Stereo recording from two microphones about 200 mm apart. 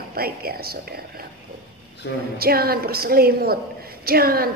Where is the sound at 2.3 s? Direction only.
50° right (ahead or behind).